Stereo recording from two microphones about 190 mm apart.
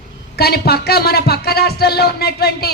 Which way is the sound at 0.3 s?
55° left (ahead or behind).